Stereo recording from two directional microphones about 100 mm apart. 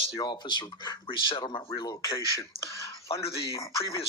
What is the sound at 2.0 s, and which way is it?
Speech, 30° left (ahead or behind).